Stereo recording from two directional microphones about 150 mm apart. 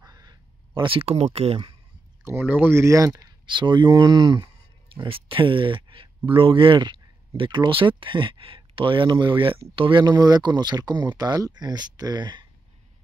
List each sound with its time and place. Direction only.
0.0 s a sound: 25° right (ahead or behind); by 1.6 s 40° right (ahead or behind)
2.2 s speech: 15° right (ahead or behind)
3.2 s speech: 30° right (ahead or behind)